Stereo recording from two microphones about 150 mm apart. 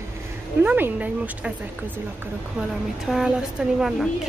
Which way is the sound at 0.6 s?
10° right (ahead or behind).